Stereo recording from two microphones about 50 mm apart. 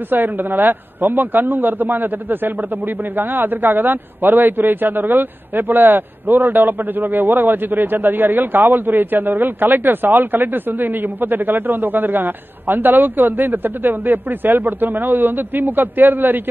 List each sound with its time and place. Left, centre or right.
0.1 s a man's voice: right